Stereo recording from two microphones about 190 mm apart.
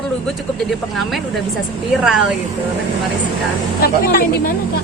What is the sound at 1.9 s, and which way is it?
Speech, centre (ahead or behind).